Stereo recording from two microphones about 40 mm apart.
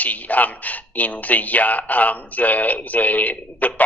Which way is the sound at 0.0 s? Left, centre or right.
Left.